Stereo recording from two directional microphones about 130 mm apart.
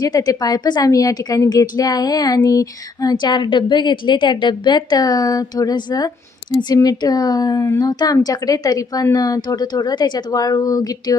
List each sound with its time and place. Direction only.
0.0 s a woman's voice: 30° left (ahead or behind)